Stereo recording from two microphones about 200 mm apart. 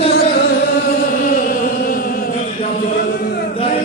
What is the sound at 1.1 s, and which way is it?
Chant, 45° left (ahead or behind).